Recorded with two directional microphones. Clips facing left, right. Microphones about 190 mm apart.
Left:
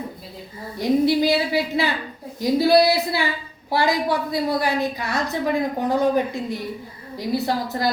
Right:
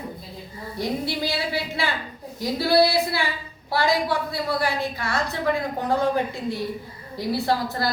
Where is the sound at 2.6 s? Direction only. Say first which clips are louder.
Left 1 dB; 20° left (ahead or behind).